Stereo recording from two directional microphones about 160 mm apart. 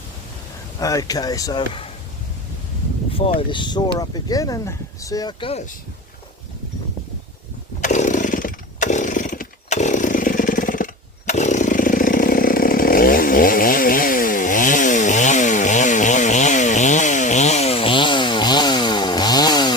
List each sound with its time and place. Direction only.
0.8 s speech: 20° left (ahead or behind)
3.1 s a sound: 35° left (ahead or behind)
3.5 s speech: 30° left (ahead or behind)
7.8 s chainsaw: 50° left (ahead or behind); by 19.7 s 25° left (ahead or behind)